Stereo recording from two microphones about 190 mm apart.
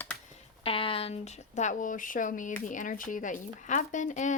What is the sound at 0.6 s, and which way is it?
Speech, 30° left (ahead or behind).